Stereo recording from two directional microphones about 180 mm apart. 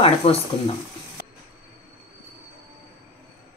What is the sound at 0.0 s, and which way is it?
Speech, 35° left (ahead or behind).